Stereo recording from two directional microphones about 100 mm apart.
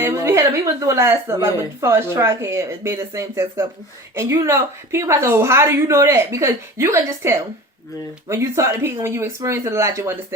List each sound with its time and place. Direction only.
0.0 s a woman's voice: 30° right (ahead or behind)